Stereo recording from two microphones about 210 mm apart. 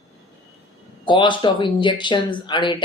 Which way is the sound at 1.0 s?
20° left (ahead or behind).